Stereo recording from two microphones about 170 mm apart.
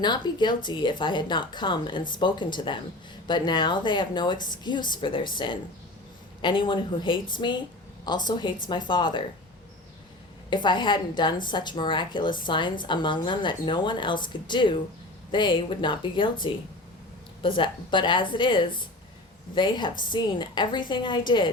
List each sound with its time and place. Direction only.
0.0 s a woman's voice: 25° left (ahead or behind)
10.5 s a woman's voice: 25° left (ahead or behind)